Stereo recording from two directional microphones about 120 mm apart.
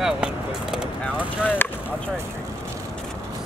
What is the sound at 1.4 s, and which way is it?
Speech, 15° left (ahead or behind).